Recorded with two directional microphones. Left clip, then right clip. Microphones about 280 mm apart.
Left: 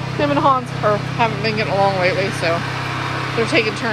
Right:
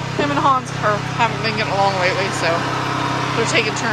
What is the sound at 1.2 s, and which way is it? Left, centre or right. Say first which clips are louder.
Speech: even; centre.